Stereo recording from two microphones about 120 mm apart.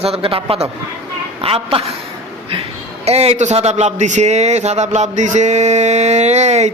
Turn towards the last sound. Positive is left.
turn(degrees=-70)  # may be behind; listen again after turning